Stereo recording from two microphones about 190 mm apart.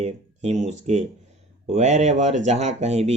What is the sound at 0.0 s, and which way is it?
Speech, 35° right (ahead or behind).